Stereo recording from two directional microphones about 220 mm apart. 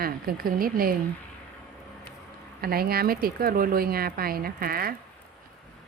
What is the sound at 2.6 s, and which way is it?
A woman's voice, 45° right (ahead or behind).